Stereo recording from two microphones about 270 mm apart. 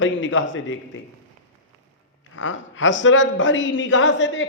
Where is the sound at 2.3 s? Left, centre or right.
Left.